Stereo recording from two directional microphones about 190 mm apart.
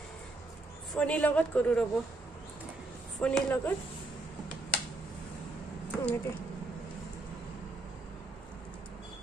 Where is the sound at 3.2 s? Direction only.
5° left (ahead or behind).